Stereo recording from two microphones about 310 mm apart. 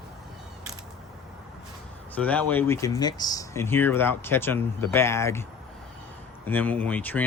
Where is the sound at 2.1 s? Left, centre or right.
Centre.